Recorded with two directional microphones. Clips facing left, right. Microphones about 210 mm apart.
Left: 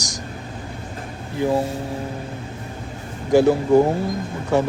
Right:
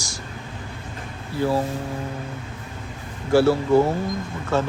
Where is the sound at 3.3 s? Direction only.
15° left (ahead or behind).